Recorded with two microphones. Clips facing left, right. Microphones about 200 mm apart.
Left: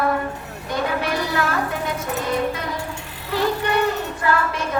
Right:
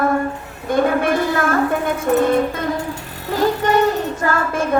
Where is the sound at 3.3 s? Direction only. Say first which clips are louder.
Right 4 dB; 45° right (ahead or behind).